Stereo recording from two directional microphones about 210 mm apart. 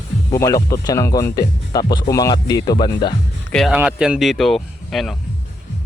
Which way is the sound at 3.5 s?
Centre (ahead or behind).